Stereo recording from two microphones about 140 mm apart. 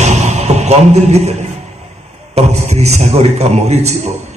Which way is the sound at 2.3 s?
50° right (ahead or behind).